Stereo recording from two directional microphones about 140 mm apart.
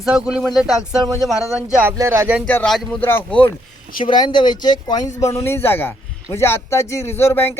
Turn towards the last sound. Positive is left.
turn(degrees=15)  # may be behind; listen again after turning